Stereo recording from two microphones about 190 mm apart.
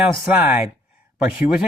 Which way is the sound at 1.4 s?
5° right (ahead or behind).